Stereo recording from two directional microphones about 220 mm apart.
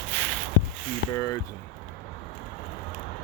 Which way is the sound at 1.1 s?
15° left (ahead or behind).